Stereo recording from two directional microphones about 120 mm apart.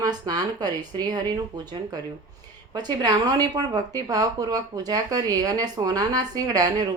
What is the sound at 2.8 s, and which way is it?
Speech, 35° right (ahead or behind).